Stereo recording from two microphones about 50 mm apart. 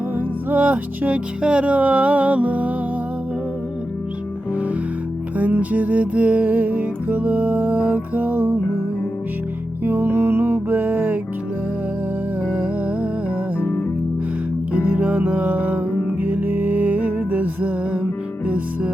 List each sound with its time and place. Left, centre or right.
0.5 s music: right
5.4 s music: right
9.8 s music: right
10.7 s music: right
12.5 s music: right
13.6 s music: left
14.8 s music: right